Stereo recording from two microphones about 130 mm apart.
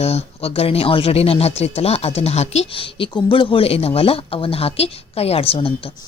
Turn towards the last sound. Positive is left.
turn(degrees=45)  # may be behind; listen again after turning